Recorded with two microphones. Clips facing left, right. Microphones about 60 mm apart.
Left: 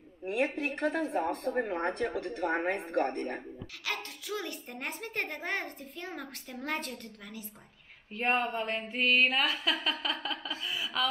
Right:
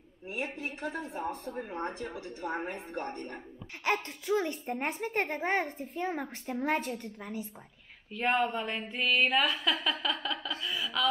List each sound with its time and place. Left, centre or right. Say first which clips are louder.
0.2 s a woman's voice: left 6 dB; left
3.8 s speech: right 7 dB; right
8.5 s a woman's voice: left 1 dB; centre
9.8 s a sound: right 1 dB; centre